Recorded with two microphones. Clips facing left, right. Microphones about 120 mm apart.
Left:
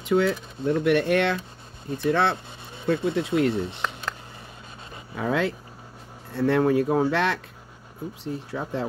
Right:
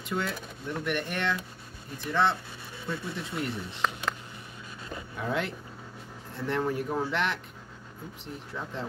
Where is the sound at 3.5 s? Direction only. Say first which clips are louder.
Left 10 dB; 25° left (ahead or behind).